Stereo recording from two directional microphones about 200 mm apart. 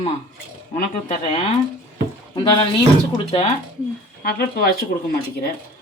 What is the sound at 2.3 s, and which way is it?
Speech, 25° left (ahead or behind).